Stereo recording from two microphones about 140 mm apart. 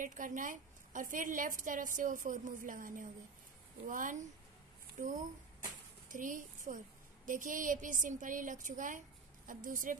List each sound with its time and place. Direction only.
0.0 s a woman's voice: 70° right (ahead or behind)
5.0 s a woman's voice: 55° right (ahead or behind)
6.0 s a woman's voice: 70° right (ahead or behind)